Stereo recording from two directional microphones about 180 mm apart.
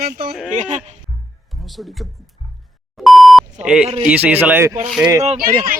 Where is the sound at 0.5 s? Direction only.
40° right (ahead or behind).